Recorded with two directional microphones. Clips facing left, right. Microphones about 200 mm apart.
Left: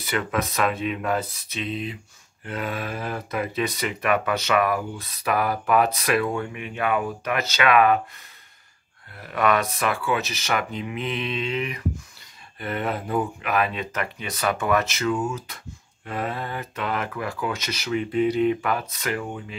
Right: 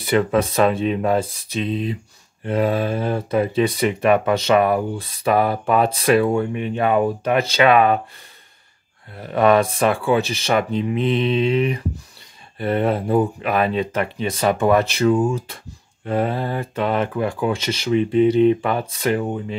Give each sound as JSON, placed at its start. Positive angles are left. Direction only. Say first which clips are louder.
{"t": 0.0, "sound": "speech", "louder": "right 8 dB", "side_deg": -30}
{"t": 9.1, "sound": "speech", "louder": "right 7 dB", "side_deg": -30}